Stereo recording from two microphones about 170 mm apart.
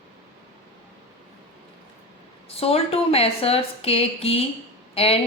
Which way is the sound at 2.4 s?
35° left (ahead or behind).